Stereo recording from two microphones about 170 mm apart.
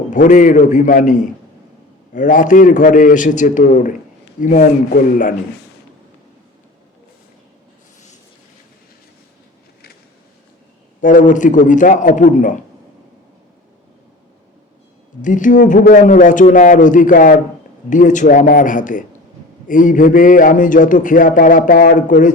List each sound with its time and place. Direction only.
0.1 s a man's voice: 50° left (ahead or behind)
11.0 s a man's voice: 50° left (ahead or behind)
15.2 s a man's voice: 50° left (ahead or behind)